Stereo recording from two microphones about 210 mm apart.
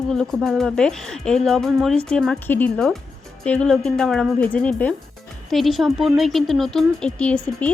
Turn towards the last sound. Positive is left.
turn(degrees=5)  # may be behind; listen again after turning